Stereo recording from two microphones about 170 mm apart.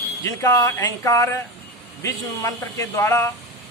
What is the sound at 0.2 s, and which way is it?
Speech, 15° left (ahead or behind).